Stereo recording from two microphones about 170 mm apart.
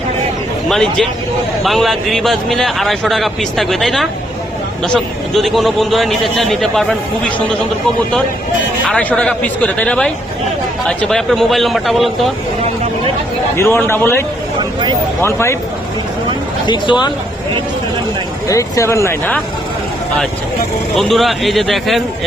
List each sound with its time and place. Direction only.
0.7 s a man's voice: 5° left (ahead or behind)
8.9 s a man's voice: 5° left (ahead or behind)
13.6 s speech: 15° left (ahead or behind)
16.6 s speech: 25° left (ahead or behind)
18.4 s speech: 20° left (ahead or behind)
20.9 s a man's voice: centre (ahead or behind)